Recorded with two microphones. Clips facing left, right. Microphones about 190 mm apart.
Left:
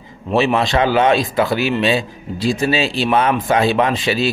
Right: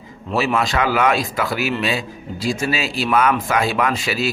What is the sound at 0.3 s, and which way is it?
A man's voice, 25° left (ahead or behind).